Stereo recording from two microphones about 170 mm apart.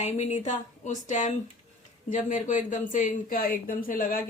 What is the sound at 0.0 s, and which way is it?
Speech, 40° left (ahead or behind).